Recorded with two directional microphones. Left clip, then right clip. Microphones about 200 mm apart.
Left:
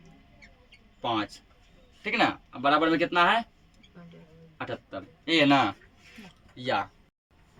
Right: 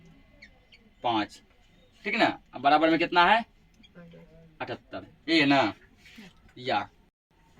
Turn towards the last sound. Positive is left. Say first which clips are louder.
# even
turn(degrees=25)  # may be behind; listen again after turning